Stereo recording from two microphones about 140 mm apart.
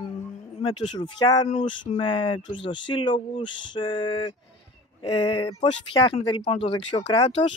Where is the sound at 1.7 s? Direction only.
35° left (ahead or behind).